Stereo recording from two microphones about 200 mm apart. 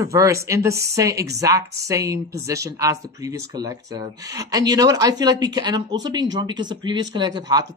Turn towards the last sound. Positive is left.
turn(degrees=-20)  # may be behind; listen again after turning